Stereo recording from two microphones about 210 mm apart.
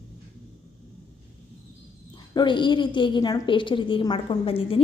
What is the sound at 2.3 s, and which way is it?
A woman's voice, 20° left (ahead or behind).